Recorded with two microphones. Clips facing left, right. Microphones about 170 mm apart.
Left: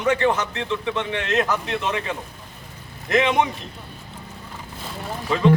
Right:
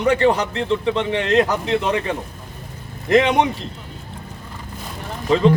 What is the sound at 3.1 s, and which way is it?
Speech, 35° right (ahead or behind).